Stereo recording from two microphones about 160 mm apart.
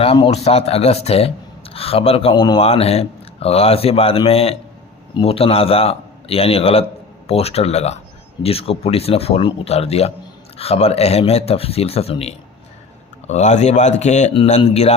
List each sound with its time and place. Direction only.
0.0 s speech: 35° left (ahead or behind)